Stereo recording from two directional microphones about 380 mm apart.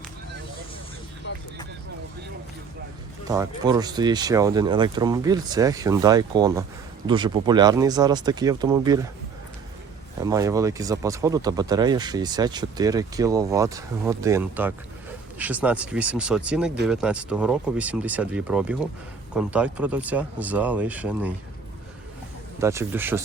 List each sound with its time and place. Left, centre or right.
1.3 s vehicle: left
3.2 s speech: centre
10.2 s speech: centre
22.6 s speech: centre